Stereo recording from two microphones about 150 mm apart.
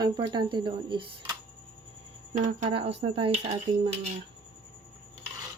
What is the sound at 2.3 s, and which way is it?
Speech, 55° right (ahead or behind).